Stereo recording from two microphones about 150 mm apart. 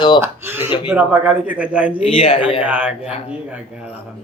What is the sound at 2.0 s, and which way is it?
Speech, 40° left (ahead or behind).